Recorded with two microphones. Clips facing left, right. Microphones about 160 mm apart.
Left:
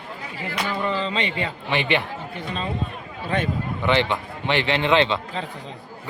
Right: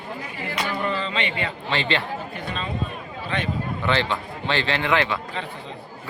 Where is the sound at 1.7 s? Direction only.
15° left (ahead or behind).